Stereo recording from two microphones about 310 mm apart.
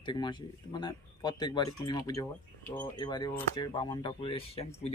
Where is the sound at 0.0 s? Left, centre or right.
Centre.